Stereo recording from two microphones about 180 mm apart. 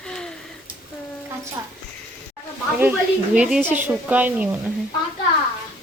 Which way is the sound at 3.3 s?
5° right (ahead or behind).